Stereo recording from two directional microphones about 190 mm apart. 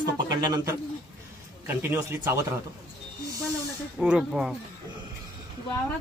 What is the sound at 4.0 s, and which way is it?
Speech, 5° right (ahead or behind).